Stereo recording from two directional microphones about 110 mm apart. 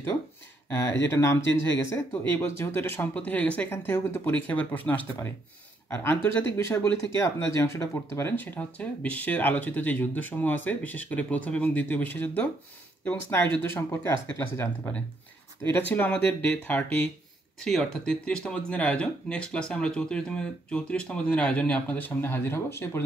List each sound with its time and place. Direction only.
0.7 s speech: 20° left (ahead or behind)
17.6 s speech: 5° left (ahead or behind); by 23.0 s 20° left (ahead or behind)